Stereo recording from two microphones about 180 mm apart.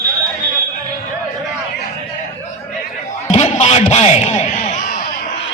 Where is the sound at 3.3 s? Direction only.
40° left (ahead or behind).